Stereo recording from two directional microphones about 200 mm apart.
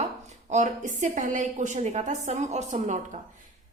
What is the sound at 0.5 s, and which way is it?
A woman's voice, 40° right (ahead or behind).